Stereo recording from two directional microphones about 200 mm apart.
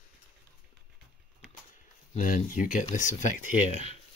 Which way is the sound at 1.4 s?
5° right (ahead or behind).